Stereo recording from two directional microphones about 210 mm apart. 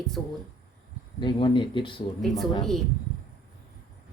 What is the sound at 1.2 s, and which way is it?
Speech, 25° left (ahead or behind).